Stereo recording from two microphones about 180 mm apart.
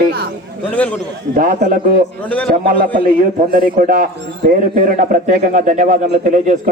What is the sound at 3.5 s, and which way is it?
A man's voice, 50° right (ahead or behind).